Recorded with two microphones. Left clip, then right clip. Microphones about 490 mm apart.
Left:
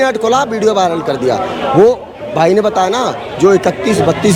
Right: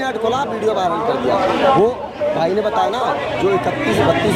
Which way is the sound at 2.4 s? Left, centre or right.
Left.